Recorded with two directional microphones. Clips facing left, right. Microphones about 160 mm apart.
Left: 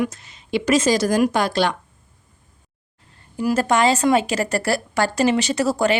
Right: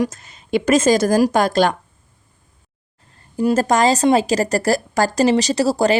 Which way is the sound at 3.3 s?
35° right (ahead or behind).